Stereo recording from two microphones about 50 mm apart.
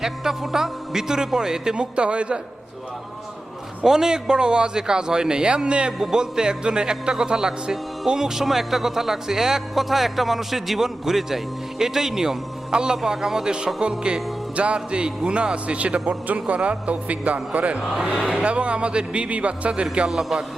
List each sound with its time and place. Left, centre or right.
0.0 s speech: centre
1.7 s speech: right
3.8 s speech: centre; by 17.8 s right
17.9 s speech: centre
20.1 s speech: centre